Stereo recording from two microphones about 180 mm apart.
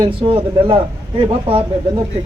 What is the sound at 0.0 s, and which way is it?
Speech, 30° right (ahead or behind).